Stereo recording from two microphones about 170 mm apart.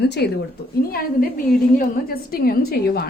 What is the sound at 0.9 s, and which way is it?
A woman's voice, 55° left (ahead or behind).